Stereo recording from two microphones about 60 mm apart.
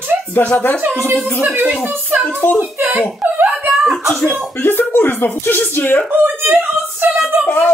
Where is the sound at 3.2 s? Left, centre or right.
Right.